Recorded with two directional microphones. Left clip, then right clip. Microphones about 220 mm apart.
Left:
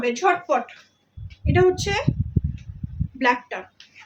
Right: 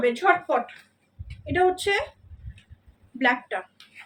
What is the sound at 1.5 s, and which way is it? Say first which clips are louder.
Speech: left 2 dB; 10° left (ahead or behind).